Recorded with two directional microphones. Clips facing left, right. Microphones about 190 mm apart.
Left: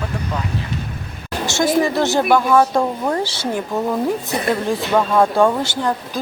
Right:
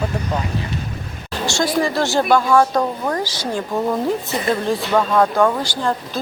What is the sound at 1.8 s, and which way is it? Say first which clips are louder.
Speech: left 1 dB; 20° left (ahead or behind).